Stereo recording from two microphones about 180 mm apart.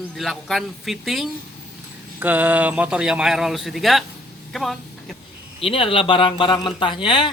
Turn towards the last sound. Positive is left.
turn(degrees=25)  # may be behind; listen again after turning